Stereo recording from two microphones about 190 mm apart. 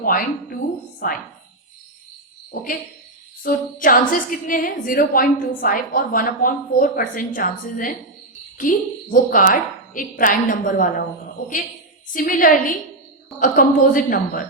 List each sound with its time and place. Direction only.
0.0 s a woman's voice: 45° left (ahead or behind)
3.4 s a woman's voice: 45° left (ahead or behind)
12.1 s a woman's voice: 45° left (ahead or behind)